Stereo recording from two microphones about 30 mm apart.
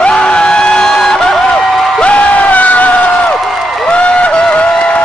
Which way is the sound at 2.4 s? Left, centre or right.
Left.